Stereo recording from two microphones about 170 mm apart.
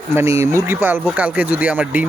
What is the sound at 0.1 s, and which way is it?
Speech, 15° right (ahead or behind).